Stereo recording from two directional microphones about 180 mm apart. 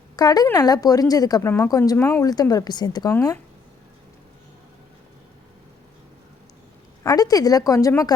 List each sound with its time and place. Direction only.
0.2 s a woman's voice: 20° left (ahead or behind)
7.0 s a woman's voice: 20° left (ahead or behind)